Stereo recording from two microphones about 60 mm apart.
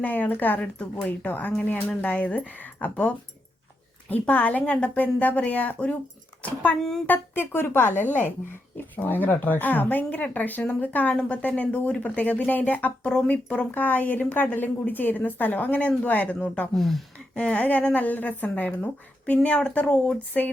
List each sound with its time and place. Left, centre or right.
0.0 s a woman's voice: left
4.1 s a woman's voice: left
7.1 s a woman's voice: left; by 13.7 s centre
13.7 s a woman's voice: left
16.7 s speech: centre
17.3 s a woman's voice: centre